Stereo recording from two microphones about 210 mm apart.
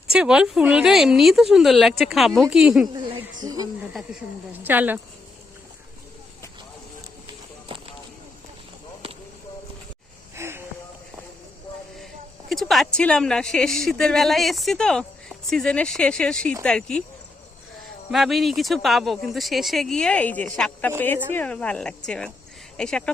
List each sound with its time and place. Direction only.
0.1 s speech: 5° right (ahead or behind)
3.4 s speech: 20° right (ahead or behind)
7.7 s a sound: 25° right (ahead or behind)
10.3 s a sound: 10° right (ahead or behind)
12.5 s speech: centre (ahead or behind)
18.1 s speech: centre (ahead or behind)